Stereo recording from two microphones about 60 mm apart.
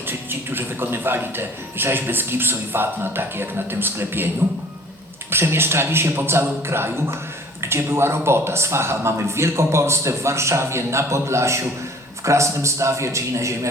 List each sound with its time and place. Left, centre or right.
0.1 s a man's voice: right